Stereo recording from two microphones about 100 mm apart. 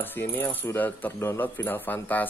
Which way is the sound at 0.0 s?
20° left (ahead or behind).